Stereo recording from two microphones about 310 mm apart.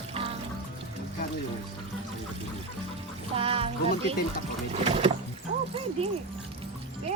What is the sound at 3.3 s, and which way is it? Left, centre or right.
Speech, centre.